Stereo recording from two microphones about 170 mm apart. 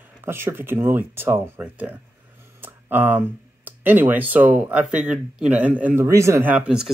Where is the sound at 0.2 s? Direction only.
15° right (ahead or behind).